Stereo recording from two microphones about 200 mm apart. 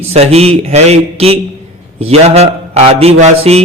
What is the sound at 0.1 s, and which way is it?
A man's voice, 30° right (ahead or behind).